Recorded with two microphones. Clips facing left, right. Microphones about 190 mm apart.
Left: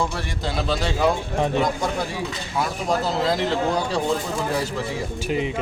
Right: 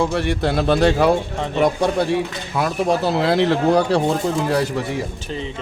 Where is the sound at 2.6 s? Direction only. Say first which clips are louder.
Right 5 dB; 65° right (ahead or behind).